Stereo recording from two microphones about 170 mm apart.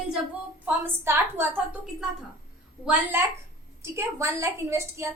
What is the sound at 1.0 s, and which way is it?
A woman's voice, 15° right (ahead or behind).